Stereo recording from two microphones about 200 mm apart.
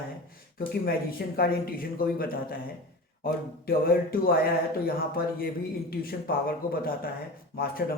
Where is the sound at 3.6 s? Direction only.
45° left (ahead or behind).